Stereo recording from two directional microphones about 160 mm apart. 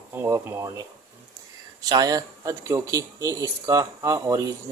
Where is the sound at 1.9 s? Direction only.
25° right (ahead or behind).